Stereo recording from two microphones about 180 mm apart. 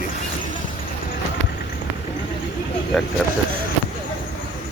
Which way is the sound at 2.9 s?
Centre (ahead or behind).